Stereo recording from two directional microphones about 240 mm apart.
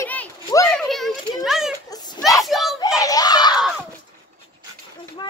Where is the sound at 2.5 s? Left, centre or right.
Centre.